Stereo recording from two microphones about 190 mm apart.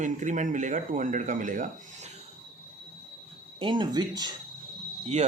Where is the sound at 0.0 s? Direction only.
40° right (ahead or behind).